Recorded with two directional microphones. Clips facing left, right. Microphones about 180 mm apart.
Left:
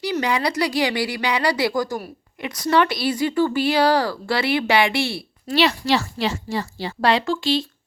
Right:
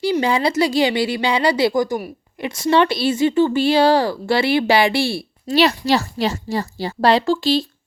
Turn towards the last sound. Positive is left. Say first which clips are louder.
# right 4 dB
turn(degrees=-35)  # may be behind; listen again after turning